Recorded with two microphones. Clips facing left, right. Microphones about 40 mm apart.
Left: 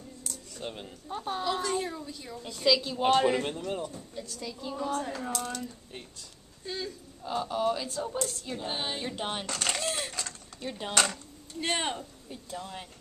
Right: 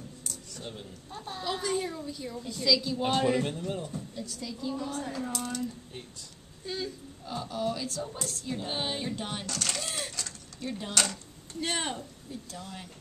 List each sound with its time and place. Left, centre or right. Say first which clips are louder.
0.6 s a woman's voice: left 5 dB; left
1.4 s female singing: right 1 dB; centre
2.5 s a woman's voice: left 1 dB; left
5.3 s female singing: even; centre
6.6 s speech: right 1 dB; centre
7.2 s a woman's voice: left 4 dB; left
8.2 s female singing: left 2 dB; centre
9.1 s speech: left 2 dB; left
10.2 s a sound: even; centre
11.6 s speech: left 2 dB; centre